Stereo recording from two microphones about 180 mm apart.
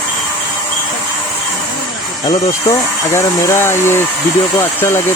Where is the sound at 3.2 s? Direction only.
15° left (ahead or behind).